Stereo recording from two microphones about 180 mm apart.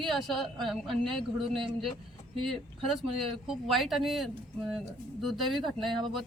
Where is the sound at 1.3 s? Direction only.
30° right (ahead or behind).